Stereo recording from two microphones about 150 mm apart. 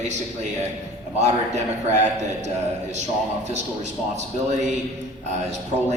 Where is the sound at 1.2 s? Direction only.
50° right (ahead or behind).